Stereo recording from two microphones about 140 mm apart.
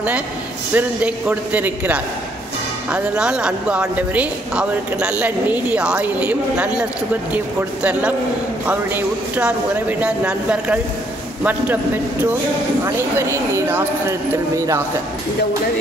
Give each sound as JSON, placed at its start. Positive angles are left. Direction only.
{"t": 0.7, "sound": "a woman's voice", "side_deg": -10}